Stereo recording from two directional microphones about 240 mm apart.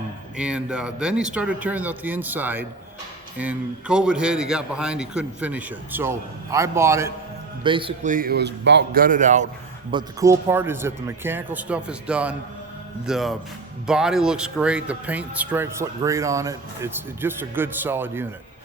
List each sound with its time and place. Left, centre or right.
0.3 s a man's voice: centre; by 9.5 s right
9.9 s a man's voice: centre